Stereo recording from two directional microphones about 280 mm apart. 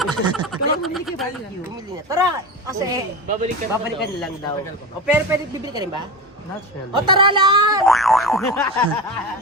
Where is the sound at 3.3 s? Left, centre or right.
Right.